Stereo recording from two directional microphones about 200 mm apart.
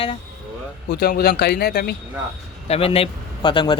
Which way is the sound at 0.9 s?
55° left (ahead or behind).